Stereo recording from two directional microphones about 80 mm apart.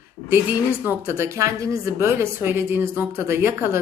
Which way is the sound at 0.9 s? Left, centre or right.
Right.